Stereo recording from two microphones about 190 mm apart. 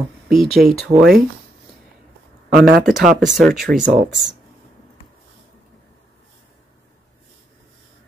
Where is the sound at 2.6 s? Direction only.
55° right (ahead or behind).